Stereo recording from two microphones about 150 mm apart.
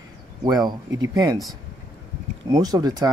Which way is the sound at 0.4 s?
25° right (ahead or behind).